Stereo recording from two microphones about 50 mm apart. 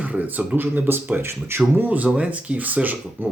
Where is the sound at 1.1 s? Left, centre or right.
Right.